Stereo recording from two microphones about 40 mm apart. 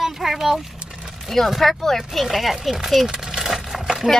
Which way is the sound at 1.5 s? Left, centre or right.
Centre.